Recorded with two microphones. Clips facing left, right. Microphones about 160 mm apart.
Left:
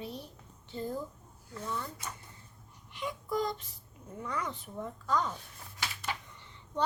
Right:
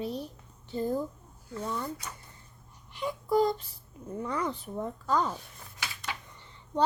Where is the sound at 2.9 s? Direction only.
35° right (ahead or behind).